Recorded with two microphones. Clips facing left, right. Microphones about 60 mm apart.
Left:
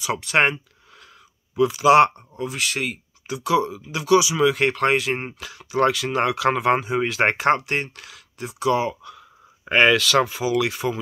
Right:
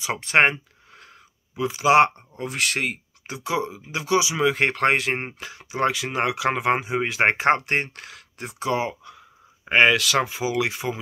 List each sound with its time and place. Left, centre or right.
0.0 s a sound: right
1.6 s speech: right
2.3 s speech: right
3.3 s speech: right
7.4 s speech: right